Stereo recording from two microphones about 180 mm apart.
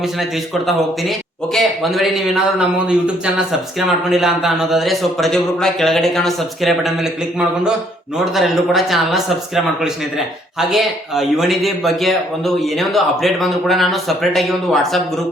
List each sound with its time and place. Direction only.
0.0 s a man's voice: centre (ahead or behind)
10.7 s a man's voice: centre (ahead or behind)